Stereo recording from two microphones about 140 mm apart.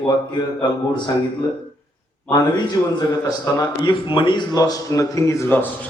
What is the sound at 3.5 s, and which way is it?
Speech, 20° left (ahead or behind).